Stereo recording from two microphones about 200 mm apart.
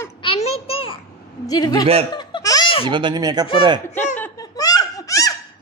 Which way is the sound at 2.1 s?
20° left (ahead or behind).